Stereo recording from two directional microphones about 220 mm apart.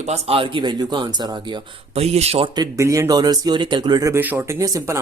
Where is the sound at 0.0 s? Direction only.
30° right (ahead or behind).